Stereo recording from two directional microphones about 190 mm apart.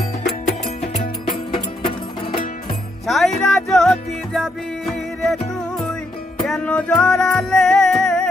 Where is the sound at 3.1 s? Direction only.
Centre (ahead or behind).